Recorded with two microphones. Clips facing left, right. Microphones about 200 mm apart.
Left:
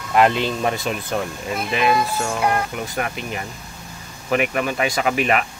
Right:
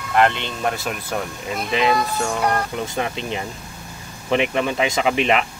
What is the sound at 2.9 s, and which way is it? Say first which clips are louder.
Speech: right 1 dB; 25° right (ahead or behind).